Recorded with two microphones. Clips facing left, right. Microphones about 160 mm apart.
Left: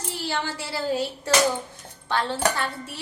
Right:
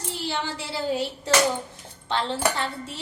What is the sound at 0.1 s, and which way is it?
Speech, 20° right (ahead or behind).